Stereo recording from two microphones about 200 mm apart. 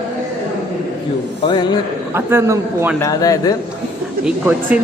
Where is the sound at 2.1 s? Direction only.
10° right (ahead or behind).